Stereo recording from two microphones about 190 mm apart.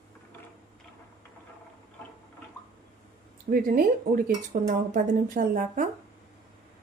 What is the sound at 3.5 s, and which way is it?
Speech, 50° right (ahead or behind).